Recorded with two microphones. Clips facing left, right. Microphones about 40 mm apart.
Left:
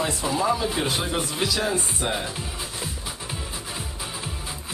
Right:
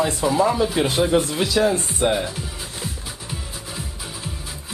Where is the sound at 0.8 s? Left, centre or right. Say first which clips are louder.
Right 7 dB; centre.